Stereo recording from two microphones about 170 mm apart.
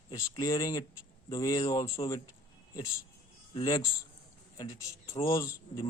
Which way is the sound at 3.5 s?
25° left (ahead or behind).